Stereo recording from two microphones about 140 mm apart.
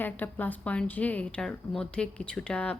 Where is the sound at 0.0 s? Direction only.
10° left (ahead or behind).